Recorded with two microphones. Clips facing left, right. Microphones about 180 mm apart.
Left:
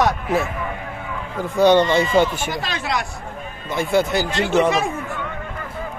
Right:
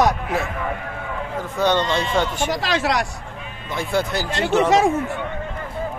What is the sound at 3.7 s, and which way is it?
Speech, centre (ahead or behind).